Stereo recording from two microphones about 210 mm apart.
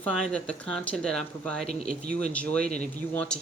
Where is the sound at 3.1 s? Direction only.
5° left (ahead or behind).